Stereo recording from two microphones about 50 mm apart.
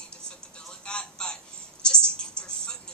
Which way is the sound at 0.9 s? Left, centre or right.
Centre.